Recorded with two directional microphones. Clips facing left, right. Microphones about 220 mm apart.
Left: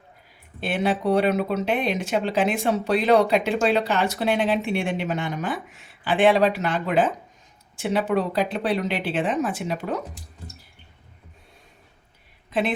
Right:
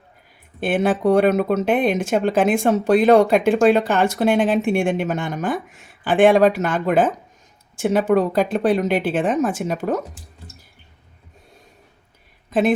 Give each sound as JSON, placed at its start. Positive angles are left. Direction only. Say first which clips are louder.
{"t": 0.6, "sound": "speech", "louder": "right 5 dB", "side_deg": -50}
{"t": 12.5, "sound": "speech", "louder": "right 6 dB", "side_deg": -45}